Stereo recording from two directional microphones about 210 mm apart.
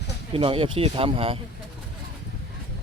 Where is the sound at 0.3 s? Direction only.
25° right (ahead or behind).